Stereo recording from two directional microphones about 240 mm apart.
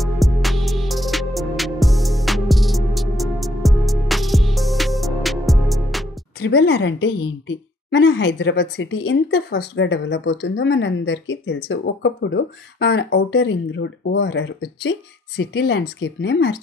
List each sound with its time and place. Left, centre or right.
0.0 s music: centre
6.4 s a woman's voice: left